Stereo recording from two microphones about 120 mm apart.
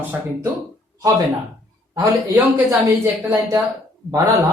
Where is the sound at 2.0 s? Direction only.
25° right (ahead or behind).